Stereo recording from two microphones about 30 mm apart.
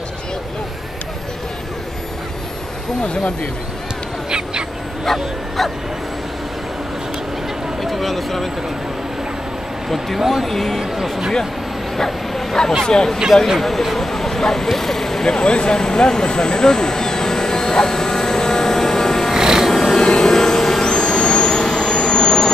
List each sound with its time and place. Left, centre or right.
5.0 s bow-wow: centre
7.8 s a sound: centre
9.8 s speech: centre
10.5 s speech: centre
10.8 s speech: centre
12.0 s bow-wow: centre
12.8 s speech: left
13.6 s speech: centre
15.2 s speech: left
15.8 s vehicle: left
19.3 s music: centre
19.7 s music: centre
20.2 s a sound: centre
20.8 s jet engine: left